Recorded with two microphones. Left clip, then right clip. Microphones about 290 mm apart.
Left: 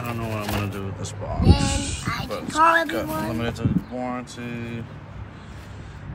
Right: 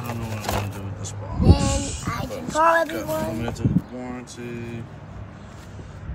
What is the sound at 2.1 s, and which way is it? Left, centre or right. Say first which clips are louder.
Speech: even; right.